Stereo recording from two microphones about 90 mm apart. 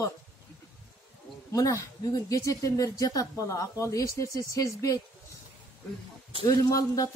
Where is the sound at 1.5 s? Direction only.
40° left (ahead or behind).